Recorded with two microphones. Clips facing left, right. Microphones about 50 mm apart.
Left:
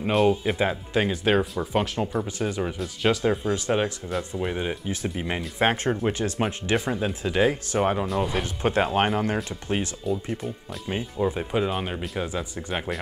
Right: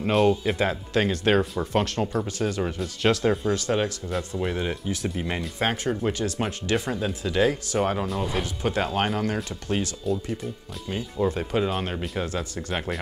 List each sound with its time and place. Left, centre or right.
0.0 s speech: centre
0.5 s speech: centre
2.6 s speech: centre
3.4 s speech: left
5.6 s speech: left
6.8 s speech: centre
7.9 s speech: centre
8.5 s speech: left
10.1 s speech: centre
12.3 s speech: centre